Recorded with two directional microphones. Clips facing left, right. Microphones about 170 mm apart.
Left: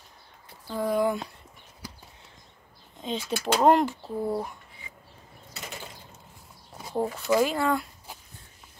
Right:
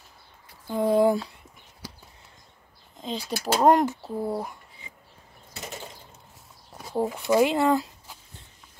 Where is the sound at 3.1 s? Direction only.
35° right (ahead or behind).